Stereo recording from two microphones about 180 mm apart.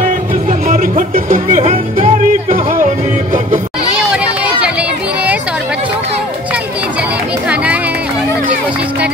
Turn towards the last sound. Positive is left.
turn(degrees=-5)  # may be behind; listen again after turning